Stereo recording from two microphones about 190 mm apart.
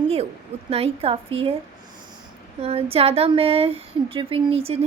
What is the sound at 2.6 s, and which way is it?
Speech, 30° right (ahead or behind).